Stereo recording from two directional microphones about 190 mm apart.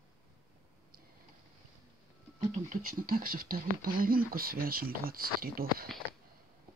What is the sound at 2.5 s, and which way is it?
Speech, 45° right (ahead or behind).